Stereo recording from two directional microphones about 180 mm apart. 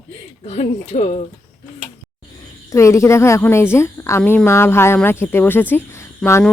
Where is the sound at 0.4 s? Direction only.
35° left (ahead or behind).